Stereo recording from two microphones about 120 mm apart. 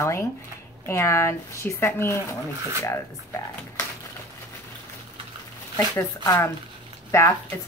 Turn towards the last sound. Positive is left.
turn(degrees=25)  # may be behind; listen again after turning